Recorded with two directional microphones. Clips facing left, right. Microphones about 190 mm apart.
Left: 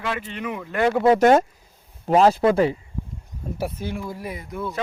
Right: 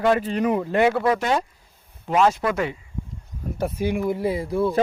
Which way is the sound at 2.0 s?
35° left (ahead or behind).